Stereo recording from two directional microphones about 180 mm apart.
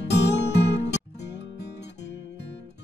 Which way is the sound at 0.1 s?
70° left (ahead or behind).